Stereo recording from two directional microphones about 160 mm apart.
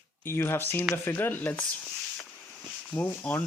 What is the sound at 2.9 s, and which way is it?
Speech, 10° left (ahead or behind).